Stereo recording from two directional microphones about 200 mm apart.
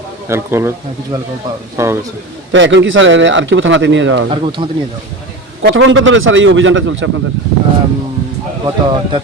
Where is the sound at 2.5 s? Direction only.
65° right (ahead or behind).